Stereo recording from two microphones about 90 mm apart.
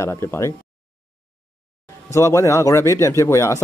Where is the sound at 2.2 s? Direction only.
35° left (ahead or behind).